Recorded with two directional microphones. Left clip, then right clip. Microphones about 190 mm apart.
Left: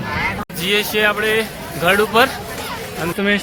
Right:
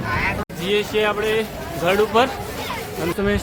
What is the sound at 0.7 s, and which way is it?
Speech, 5° left (ahead or behind).